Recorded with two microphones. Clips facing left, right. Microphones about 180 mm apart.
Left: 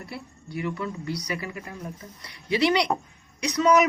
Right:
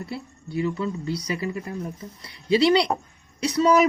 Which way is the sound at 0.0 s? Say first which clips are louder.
Right 5 dB; 25° right (ahead or behind).